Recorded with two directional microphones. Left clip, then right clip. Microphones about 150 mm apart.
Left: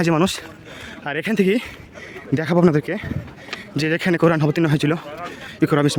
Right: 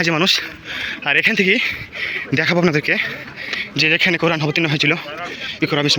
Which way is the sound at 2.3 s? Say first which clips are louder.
Right 4 dB; 35° left (ahead or behind).